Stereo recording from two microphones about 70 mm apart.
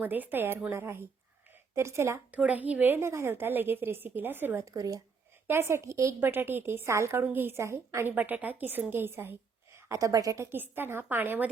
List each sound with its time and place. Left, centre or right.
0.0 s a woman's voice: right
2.3 s a woman's voice: right
4.6 s a woman's voice: right
5.5 s a woman's voice: right
6.1 s a woman's voice: right
8.1 s a woman's voice: right
9.7 s a woman's voice: right
10.5 s a woman's voice: right